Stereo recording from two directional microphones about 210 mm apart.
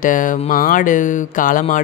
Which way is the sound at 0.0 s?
40° left (ahead or behind).